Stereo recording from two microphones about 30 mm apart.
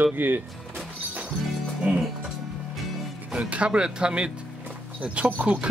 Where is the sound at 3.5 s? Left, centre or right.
Right.